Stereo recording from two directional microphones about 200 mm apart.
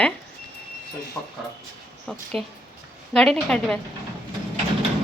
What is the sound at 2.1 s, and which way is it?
Speech, centre (ahead or behind).